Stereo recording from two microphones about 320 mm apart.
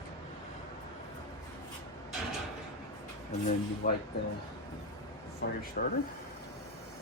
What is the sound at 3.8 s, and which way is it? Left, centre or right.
Speech, left.